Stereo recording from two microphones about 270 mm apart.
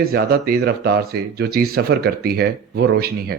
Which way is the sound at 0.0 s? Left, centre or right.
Right.